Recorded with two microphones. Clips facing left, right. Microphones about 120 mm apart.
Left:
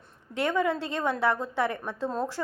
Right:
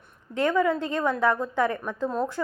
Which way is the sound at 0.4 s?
25° left (ahead or behind).